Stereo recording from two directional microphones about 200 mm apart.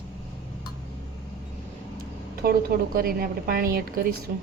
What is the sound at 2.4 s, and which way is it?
A woman's voice, 50° right (ahead or behind).